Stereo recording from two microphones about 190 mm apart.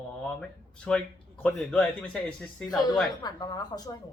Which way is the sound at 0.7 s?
5° left (ahead or behind).